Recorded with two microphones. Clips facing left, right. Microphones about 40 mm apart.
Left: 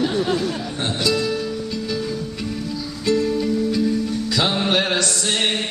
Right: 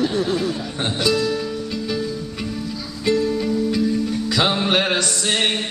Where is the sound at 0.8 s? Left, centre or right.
Centre.